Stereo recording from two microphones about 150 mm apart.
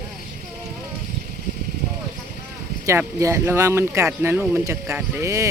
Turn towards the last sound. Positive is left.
turn(degrees=-20)  # may be behind; listen again after turning